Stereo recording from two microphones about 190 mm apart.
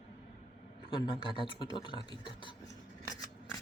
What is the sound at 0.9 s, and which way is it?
Speech, 25° left (ahead or behind).